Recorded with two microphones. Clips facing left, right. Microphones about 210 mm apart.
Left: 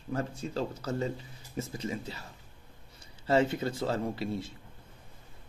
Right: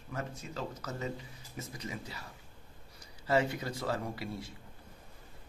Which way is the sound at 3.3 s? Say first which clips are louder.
Left 4 dB; 25° left (ahead or behind).